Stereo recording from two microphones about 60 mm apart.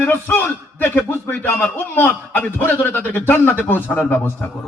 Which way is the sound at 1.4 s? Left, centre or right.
Left.